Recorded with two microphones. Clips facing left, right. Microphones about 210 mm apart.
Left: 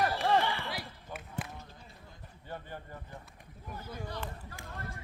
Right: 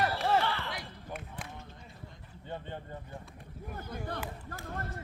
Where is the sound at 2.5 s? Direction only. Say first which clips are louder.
Right 2 dB; 20° right (ahead or behind).